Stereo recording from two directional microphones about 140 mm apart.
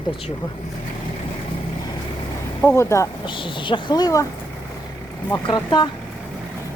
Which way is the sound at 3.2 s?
35° left (ahead or behind).